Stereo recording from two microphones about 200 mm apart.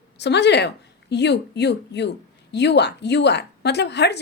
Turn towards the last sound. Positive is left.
turn(degrees=55)  # may be behind; listen again after turning